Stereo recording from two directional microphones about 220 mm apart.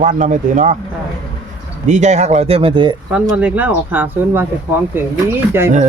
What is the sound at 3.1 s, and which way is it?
Speech, 5° right (ahead or behind).